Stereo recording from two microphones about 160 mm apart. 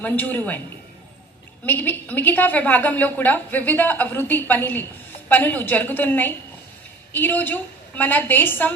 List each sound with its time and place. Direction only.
0.0 s a woman's voice: 10° left (ahead or behind)
1.6 s a woman's voice: 10° left (ahead or behind)